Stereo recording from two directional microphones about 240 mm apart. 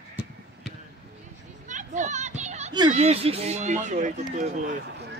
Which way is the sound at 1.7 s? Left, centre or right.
Right.